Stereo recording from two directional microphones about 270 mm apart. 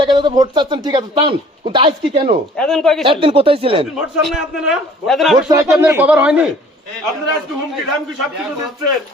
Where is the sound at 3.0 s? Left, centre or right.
Centre.